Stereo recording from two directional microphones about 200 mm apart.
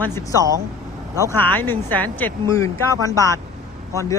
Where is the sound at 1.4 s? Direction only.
10° left (ahead or behind).